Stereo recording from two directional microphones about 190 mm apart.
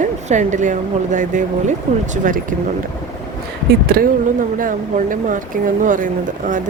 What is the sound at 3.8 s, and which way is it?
Speech, 50° right (ahead or behind).